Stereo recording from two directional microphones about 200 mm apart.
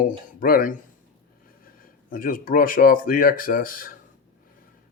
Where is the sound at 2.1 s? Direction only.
45° left (ahead or behind).